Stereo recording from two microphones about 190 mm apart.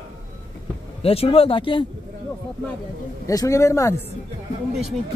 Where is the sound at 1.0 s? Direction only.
30° left (ahead or behind).